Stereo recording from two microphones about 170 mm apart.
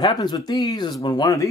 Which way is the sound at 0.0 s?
25° left (ahead or behind).